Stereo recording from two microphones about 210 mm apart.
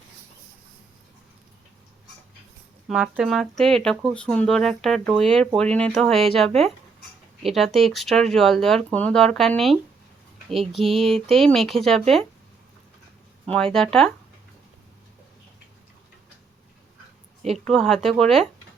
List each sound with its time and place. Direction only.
2.8 s speech: 5° right (ahead or behind)
10.8 s a sound: 25° right (ahead or behind)
11.1 s speech: centre (ahead or behind)
13.5 s speech: 5° left (ahead or behind)
17.7 s speech: centre (ahead or behind)